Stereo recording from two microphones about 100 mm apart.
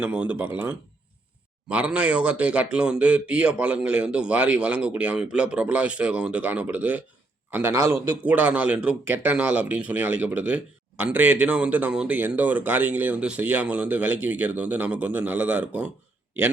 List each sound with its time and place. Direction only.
0.0 s speech: 15° right (ahead or behind)
7.7 s a man's voice: 30° right (ahead or behind)
8.2 s speech: 15° right (ahead or behind)